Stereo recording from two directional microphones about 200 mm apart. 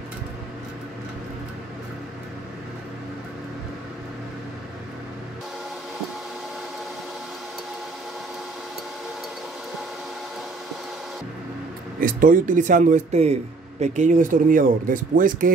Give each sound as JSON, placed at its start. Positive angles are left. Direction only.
{"t": 12.0, "sound": "a man's voice", "side_deg": -45}